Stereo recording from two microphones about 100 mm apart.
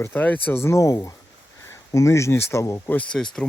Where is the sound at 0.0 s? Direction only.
20° left (ahead or behind).